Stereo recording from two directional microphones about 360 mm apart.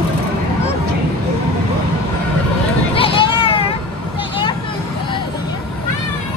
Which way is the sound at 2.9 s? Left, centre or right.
Centre.